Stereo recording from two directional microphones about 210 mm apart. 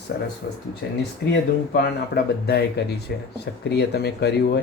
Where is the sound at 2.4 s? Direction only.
50° left (ahead or behind).